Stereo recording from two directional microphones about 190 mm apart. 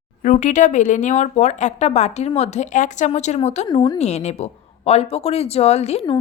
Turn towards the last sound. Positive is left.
turn(degrees=35)  # may be behind; listen again after turning